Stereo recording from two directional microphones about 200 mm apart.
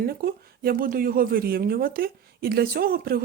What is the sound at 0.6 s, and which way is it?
Speech, 45° right (ahead or behind).